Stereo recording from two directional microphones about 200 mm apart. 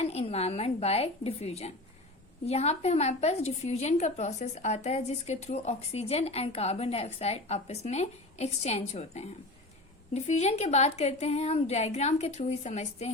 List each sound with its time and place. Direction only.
0.0 s a woman's voice: 30° left (ahead or behind)